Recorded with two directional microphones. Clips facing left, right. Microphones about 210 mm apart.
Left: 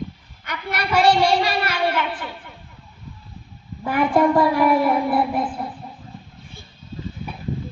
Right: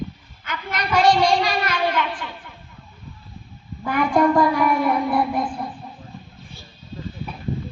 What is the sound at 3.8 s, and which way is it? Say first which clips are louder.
A child's voice: left 1 dB; 5° left (ahead or behind).